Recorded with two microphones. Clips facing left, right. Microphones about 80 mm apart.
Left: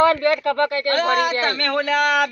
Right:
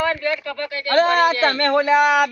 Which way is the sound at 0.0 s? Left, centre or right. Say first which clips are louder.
Left 5 dB; left.